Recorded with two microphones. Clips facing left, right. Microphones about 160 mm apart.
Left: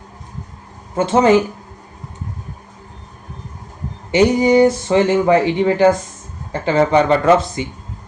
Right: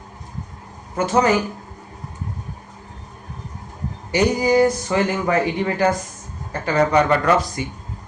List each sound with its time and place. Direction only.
0.9 s speech: 25° left (ahead or behind)
4.1 s speech: 25° left (ahead or behind)